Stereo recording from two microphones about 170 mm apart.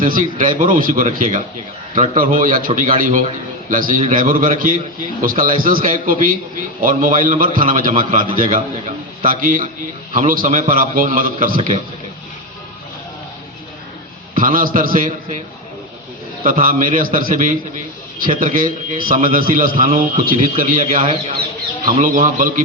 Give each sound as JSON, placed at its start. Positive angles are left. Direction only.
{"t": 0.0, "sound": "a man's voice", "side_deg": -50}
{"t": 14.3, "sound": "a man's voice", "side_deg": -55}
{"t": 16.4, "sound": "a man's voice", "side_deg": -50}